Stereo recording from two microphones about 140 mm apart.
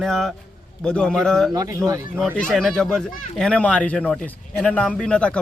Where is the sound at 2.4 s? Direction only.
5° left (ahead or behind).